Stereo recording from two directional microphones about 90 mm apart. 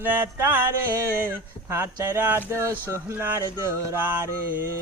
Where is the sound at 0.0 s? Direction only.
20° right (ahead or behind).